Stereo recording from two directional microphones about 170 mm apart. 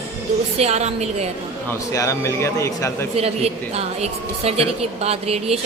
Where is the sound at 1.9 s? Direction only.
20° left (ahead or behind).